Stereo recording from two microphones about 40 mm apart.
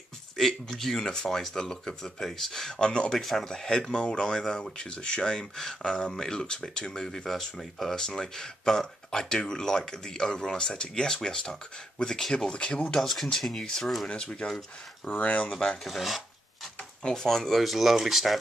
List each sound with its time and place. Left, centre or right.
0.4 s speech: centre
2.9 s speech: left
3.2 s speech: centre
3.4 s speech: centre
12.5 s speech: left
13.0 s speech: centre
14.0 s speech: left
15.8 s speech: centre
17.0 s speech: centre
17.3 s speech: centre